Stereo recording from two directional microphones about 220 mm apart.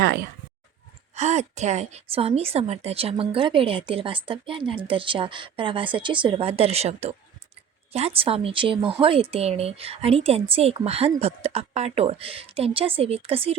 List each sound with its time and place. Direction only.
1.1 s speech: 30° right (ahead or behind)